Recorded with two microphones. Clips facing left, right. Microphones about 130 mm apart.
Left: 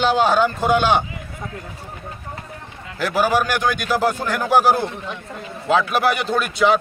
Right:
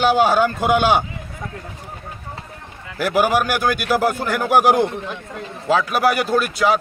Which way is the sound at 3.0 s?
10° right (ahead or behind).